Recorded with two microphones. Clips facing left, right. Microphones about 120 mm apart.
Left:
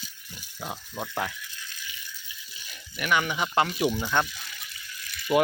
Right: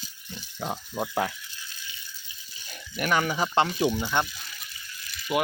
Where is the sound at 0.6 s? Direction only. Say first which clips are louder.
Right 4 dB; 25° right (ahead or behind).